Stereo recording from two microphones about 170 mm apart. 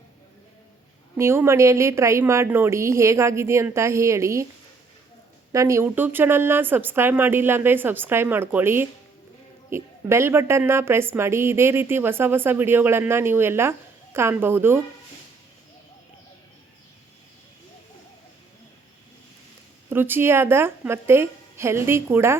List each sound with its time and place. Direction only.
1.1 s a woman's voice: 15° right (ahead or behind)
5.5 s a woman's voice: 15° right (ahead or behind)
19.9 s a woman's voice: 10° right (ahead or behind)